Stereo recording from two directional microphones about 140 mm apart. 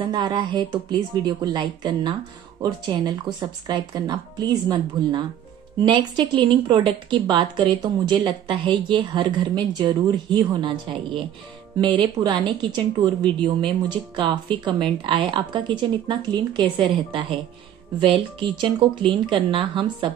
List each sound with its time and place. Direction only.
0.0 s speech: 35° right (ahead or behind)